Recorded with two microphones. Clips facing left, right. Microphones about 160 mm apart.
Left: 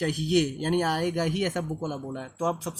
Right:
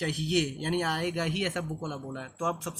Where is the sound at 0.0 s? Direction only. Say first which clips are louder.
Left 4 dB; 45° left (ahead or behind).